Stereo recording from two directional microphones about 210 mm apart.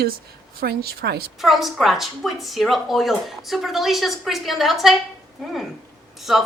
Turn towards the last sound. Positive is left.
turn(degrees=0)  # may be behind; listen again after turning